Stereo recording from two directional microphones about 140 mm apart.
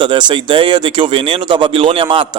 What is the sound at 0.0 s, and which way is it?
Speech, 35° right (ahead or behind).